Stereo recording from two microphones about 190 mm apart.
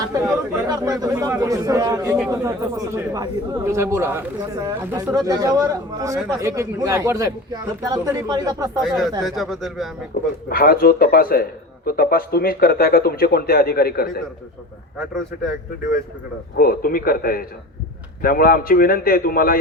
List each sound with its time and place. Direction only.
0.0 s speech: 15° right (ahead or behind)
8.8 s speech: centre (ahead or behind)
10.1 s a man's voice: 55° left (ahead or behind)
16.6 s speech: 50° left (ahead or behind)